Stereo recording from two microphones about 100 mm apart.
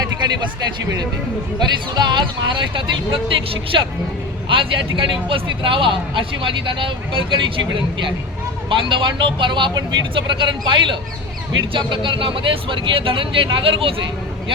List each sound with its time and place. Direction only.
1.5 s speech: 45° right (ahead or behind); by 13.9 s 65° right (ahead or behind)